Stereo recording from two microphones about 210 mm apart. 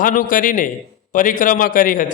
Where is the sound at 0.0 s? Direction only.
40° left (ahead or behind).